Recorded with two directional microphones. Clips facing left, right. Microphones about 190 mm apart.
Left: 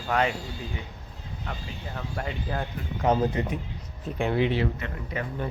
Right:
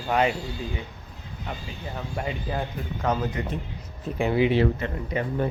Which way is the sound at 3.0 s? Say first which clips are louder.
Left 3 dB; 25° left (ahead or behind).